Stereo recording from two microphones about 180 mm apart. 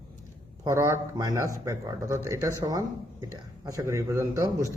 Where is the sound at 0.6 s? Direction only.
15° right (ahead or behind).